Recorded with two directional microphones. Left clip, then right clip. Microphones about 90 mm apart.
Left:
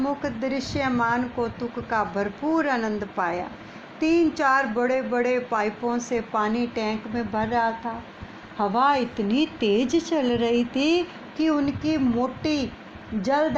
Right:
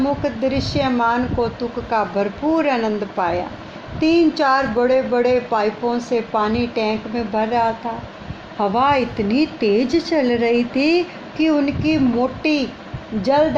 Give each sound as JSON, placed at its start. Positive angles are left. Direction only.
{"t": 0.0, "sound": "a woman's voice", "side_deg": 55}